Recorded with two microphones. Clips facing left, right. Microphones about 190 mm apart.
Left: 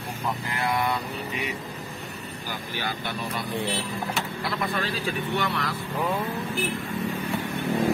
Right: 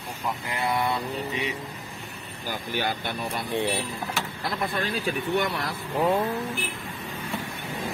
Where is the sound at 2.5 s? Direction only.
50° right (ahead or behind).